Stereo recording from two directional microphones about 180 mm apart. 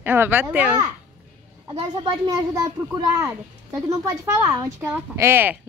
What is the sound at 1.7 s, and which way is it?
A child's voice, 25° right (ahead or behind).